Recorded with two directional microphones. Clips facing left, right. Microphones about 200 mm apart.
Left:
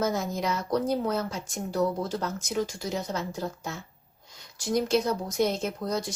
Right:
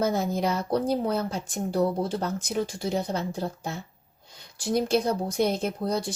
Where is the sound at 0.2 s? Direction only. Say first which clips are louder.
Right 3 dB; 30° right (ahead or behind).